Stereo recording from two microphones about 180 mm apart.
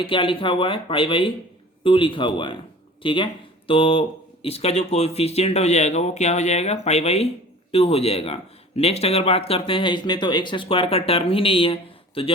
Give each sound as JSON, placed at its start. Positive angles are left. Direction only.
{"t": 0.0, "sound": "speech", "side_deg": 30}